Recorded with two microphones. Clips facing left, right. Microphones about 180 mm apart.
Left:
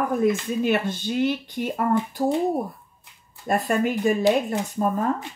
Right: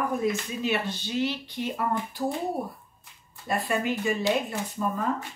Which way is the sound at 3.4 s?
45° left (ahead or behind).